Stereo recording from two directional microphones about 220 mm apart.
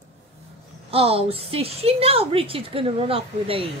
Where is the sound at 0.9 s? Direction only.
25° right (ahead or behind).